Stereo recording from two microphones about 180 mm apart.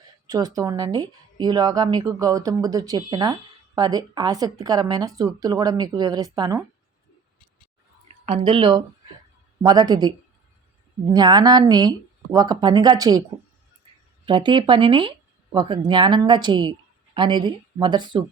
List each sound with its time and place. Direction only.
0.3 s speech: 20° right (ahead or behind)
8.0 s a sound: 40° right (ahead or behind)
8.5 s speech: 30° right (ahead or behind)
11.1 s speech: 20° right (ahead or behind)
14.3 s speech: 25° right (ahead or behind)